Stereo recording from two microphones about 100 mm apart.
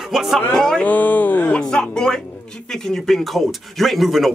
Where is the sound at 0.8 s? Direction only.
15° left (ahead or behind).